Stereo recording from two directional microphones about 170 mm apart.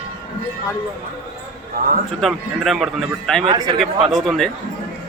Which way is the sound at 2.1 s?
Centre (ahead or behind).